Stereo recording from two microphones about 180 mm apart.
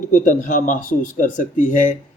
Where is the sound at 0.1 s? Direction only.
45° left (ahead or behind).